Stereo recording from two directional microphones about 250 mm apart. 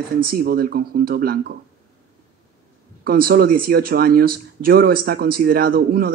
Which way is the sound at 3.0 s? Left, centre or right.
Right.